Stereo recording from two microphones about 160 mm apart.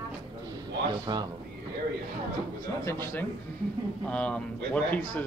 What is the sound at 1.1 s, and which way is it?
Speech, 30° right (ahead or behind).